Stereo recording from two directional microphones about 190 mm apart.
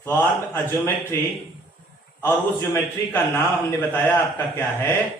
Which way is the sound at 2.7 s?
10° left (ahead or behind).